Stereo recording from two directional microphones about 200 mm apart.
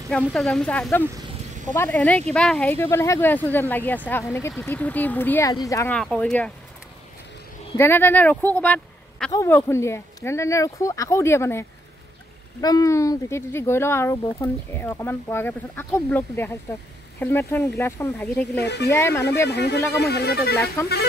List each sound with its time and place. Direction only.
0.1 s speech: 5° left (ahead or behind)
5.9 s speech: 5° left (ahead or behind)
7.7 s speech: 10° left (ahead or behind)
18.6 s speech: 55° left (ahead or behind)
18.9 s speech: 15° left (ahead or behind)
19.5 s speech: 55° left (ahead or behind)